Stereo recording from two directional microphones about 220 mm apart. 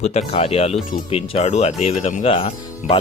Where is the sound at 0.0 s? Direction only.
30° left (ahead or behind).